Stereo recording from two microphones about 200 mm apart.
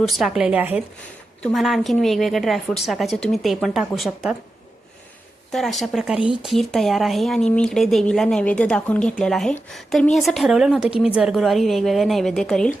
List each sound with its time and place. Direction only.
0.1 s speech: centre (ahead or behind)
5.5 s speech: centre (ahead or behind)